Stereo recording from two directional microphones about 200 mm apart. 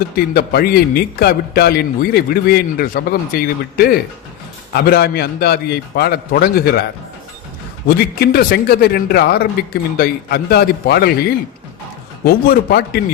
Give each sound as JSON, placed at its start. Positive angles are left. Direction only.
{"t": 0.3, "sound": "a man's voice", "side_deg": 50}
{"t": 7.9, "sound": "a man's voice", "side_deg": 50}